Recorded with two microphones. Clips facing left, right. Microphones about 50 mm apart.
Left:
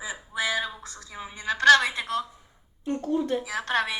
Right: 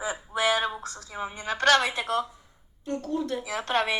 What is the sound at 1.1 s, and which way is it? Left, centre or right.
Speech, centre.